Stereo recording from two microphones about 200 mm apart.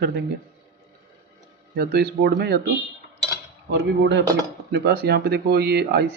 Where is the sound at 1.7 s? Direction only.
55° right (ahead or behind).